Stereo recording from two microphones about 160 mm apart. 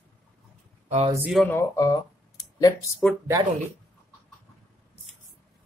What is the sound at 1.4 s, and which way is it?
Speech, 15° left (ahead or behind).